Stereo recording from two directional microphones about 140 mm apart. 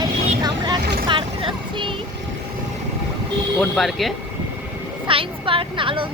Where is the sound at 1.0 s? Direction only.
35° right (ahead or behind).